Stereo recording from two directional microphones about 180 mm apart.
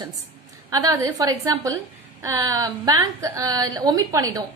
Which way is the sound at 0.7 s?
20° right (ahead or behind).